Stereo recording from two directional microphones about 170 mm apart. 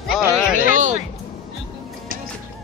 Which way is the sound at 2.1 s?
55° right (ahead or behind).